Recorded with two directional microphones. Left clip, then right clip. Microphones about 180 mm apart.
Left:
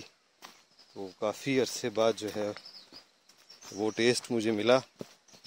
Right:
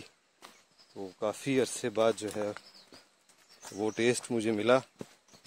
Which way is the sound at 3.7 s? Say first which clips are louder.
Left 2 dB; 10° left (ahead or behind).